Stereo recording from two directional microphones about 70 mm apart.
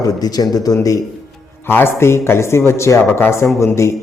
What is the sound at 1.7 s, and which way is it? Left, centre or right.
Speech, left.